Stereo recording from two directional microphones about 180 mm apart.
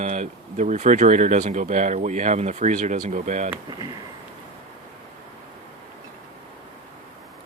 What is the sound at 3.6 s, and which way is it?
Speech, 25° right (ahead or behind).